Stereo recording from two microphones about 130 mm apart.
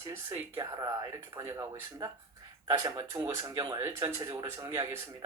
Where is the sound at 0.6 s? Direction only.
25° right (ahead or behind).